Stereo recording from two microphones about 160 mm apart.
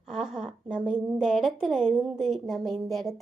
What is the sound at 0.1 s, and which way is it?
A woman's voice, 5° right (ahead or behind).